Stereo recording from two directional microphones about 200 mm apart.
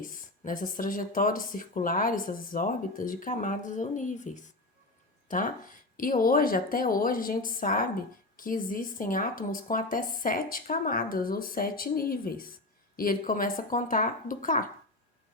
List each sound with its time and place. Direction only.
0.0 s speech: 45° left (ahead or behind)